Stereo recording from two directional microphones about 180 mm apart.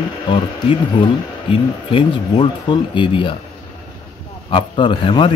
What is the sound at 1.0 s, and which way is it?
Speech, 30° left (ahead or behind).